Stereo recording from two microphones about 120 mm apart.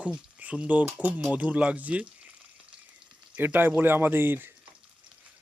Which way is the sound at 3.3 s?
15° right (ahead or behind).